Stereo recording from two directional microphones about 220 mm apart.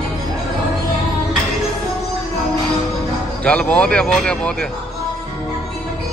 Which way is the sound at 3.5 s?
5° left (ahead or behind).